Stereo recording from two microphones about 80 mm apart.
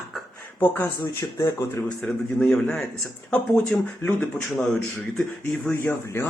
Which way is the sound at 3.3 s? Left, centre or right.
Centre.